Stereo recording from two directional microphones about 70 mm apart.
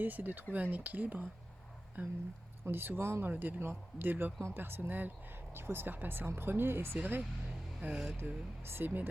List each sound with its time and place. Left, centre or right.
0.0 s speech: right